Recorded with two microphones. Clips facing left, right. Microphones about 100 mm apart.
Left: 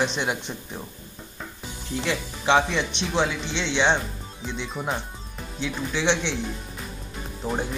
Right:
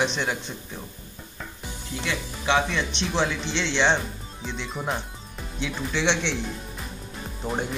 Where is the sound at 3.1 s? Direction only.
5° left (ahead or behind).